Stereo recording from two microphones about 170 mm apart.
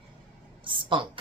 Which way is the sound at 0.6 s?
30° right (ahead or behind).